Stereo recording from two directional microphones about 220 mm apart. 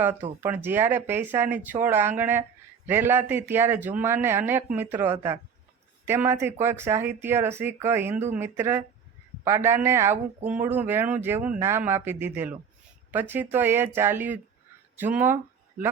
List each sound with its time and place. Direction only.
0.4 s speech: 10° right (ahead or behind)